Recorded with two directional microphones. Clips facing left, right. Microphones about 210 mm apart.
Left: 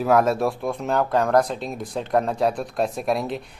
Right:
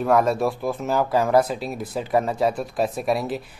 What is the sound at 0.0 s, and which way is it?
Speech, centre (ahead or behind).